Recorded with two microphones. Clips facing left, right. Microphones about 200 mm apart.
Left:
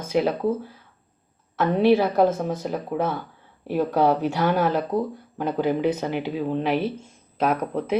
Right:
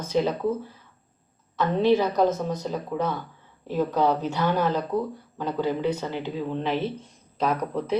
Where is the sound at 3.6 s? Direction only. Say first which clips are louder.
Left 2 dB; 15° left (ahead or behind).